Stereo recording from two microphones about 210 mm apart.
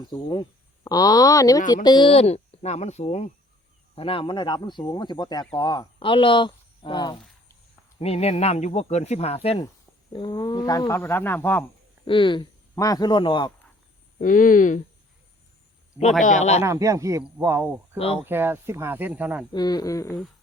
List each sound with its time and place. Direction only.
0.1 s speech: 20° left (ahead or behind)
12.0 s speech: 25° left (ahead or behind)
14.2 s speech: 40° left (ahead or behind)
16.2 s speech: 35° left (ahead or behind)
16.6 s speech: 15° right (ahead or behind)
17.9 s speech: 30° left (ahead or behind)
18.2 s speech: 10° right (ahead or behind)
19.5 s speech: 20° left (ahead or behind)